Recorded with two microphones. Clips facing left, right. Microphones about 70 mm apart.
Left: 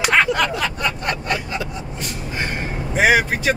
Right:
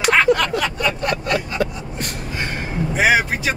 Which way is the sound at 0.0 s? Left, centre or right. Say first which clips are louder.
Right 2 dB; centre.